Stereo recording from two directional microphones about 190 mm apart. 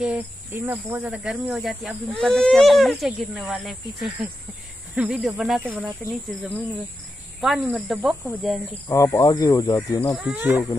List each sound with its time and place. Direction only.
0.0 s speech: 10° right (ahead or behind)
7.3 s speech: centre (ahead or behind)
8.8 s speech: 15° left (ahead or behind)
10.1 s speech: 5° right (ahead or behind)